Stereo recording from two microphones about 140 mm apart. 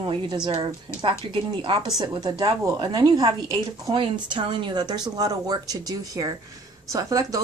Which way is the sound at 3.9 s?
35° right (ahead or behind).